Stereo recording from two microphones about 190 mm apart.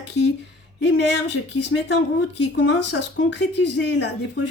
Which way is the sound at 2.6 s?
70° left (ahead or behind).